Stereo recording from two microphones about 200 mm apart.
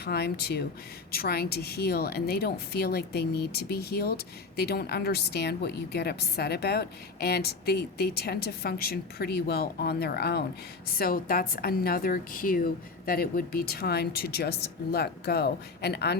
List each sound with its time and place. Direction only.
0.0 s a woman's voice: 50° left (ahead or behind)